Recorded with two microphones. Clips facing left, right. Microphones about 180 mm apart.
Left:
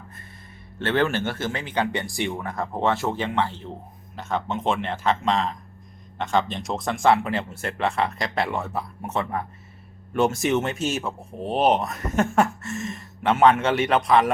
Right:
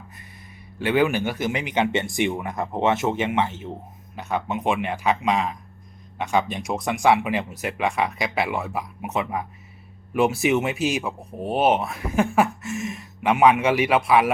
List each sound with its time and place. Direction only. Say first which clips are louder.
0.8 s speech: right 2 dB; 10° right (ahead or behind)
6.6 s speech: right 1 dB; centre (ahead or behind)
7.0 s speech: even; 15° right (ahead or behind)
8.0 s speech: right 1 dB; centre (ahead or behind)
8.6 s speech: right 1 dB; 10° right (ahead or behind)
10.8 s speech: right 2 dB; 15° right (ahead or behind)
11.3 s speech: even; 5° right (ahead or behind)
12.6 s a sound: right 2 dB; centre (ahead or behind)
13.2 s speech: right 1 dB; 15° right (ahead or behind)